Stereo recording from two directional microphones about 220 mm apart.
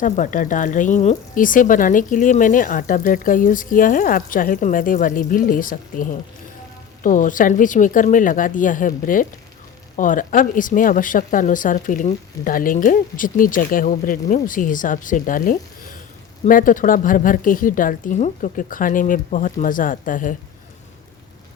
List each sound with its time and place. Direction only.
0.0 s a woman's voice: 35° left (ahead or behind)